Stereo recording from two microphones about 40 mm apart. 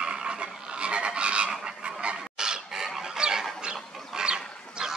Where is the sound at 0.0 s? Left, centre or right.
Right.